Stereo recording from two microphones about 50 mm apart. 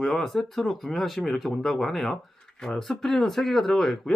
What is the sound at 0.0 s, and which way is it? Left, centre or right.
Speech, centre.